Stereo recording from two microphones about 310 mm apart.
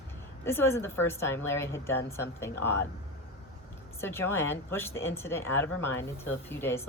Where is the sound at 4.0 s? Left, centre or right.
Centre.